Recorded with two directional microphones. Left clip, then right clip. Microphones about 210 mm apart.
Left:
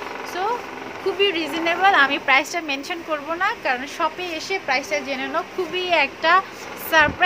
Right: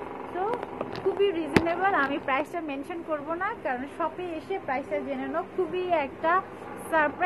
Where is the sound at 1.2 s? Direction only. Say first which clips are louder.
Left 4 dB; 25° left (ahead or behind).